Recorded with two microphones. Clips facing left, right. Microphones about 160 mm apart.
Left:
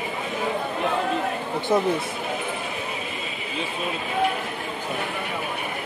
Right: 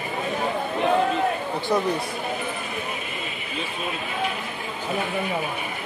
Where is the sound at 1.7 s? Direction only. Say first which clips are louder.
Left 2 dB; 20° left (ahead or behind).